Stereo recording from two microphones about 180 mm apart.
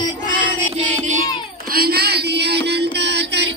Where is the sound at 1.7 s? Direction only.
60° right (ahead or behind).